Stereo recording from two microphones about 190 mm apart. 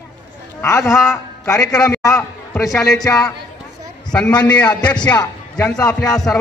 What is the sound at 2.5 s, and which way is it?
Speech, centre (ahead or behind).